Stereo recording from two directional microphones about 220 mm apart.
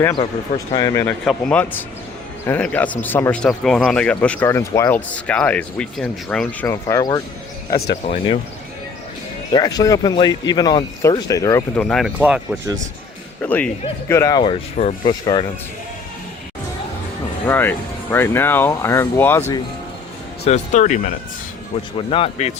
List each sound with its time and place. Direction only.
0.0 s speech: 20° left (ahead or behind)
9.5 s speech: 20° left (ahead or behind)
11.8 s speech: centre (ahead or behind)
13.4 s speech: 5° left (ahead or behind)
17.4 s speech: 10° left (ahead or behind)
20.4 s speech: 30° left (ahead or behind)
21.9 s speech: 25° left (ahead or behind)